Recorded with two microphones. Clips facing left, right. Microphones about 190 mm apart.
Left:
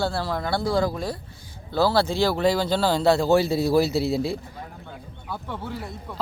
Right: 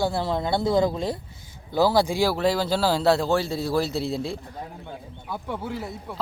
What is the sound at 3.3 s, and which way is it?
A man's voice, 10° left (ahead or behind).